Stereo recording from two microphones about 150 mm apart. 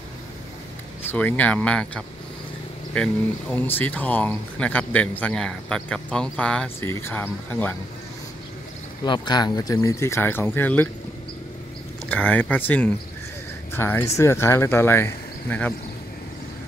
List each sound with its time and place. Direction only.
1.0 s speech: 10° left (ahead or behind)
9.0 s speech: 30° left (ahead or behind); by 10.9 s 15° left (ahead or behind)
12.1 s speech: 10° left (ahead or behind)